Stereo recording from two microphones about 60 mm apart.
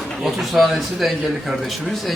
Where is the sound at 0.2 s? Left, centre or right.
Centre.